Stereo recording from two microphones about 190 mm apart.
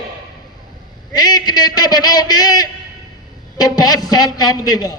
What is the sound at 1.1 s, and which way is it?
A man's voice, 20° left (ahead or behind).